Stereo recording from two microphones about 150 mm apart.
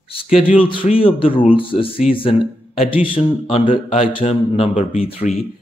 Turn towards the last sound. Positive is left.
turn(degrees=45)  # may be behind; listen again after turning